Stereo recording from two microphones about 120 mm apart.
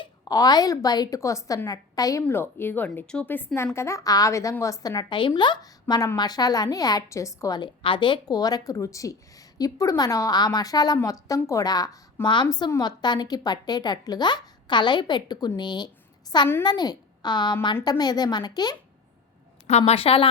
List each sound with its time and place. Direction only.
0.0 s a woman's voice: 35° left (ahead or behind)
2.2 s a woman's voice: 15° left (ahead or behind)
7.8 s a woman's voice: 45° left (ahead or behind)
19.6 s a woman's voice: 65° left (ahead or behind)